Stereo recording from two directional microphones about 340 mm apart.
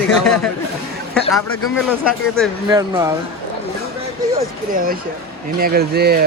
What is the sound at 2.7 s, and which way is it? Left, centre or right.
Speech, centre.